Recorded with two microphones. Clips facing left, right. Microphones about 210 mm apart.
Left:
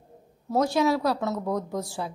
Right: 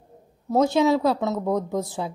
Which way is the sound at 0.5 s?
25° right (ahead or behind).